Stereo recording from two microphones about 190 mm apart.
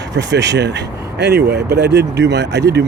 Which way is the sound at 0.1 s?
65° right (ahead or behind).